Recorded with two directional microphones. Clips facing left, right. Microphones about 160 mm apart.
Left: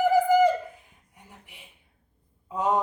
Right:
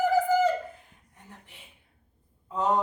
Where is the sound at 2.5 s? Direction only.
10° left (ahead or behind).